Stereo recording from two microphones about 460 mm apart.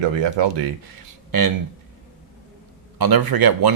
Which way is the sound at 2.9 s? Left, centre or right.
Right.